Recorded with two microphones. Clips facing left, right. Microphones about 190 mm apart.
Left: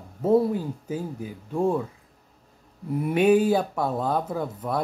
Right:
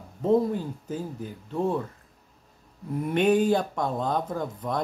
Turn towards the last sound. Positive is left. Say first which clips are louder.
# left 2 dB
turn(degrees=5)  # may be behind; listen again after turning